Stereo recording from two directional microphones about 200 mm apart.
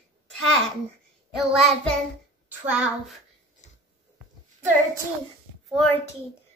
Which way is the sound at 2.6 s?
5° right (ahead or behind).